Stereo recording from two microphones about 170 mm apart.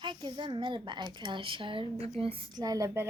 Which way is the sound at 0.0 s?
25° right (ahead or behind).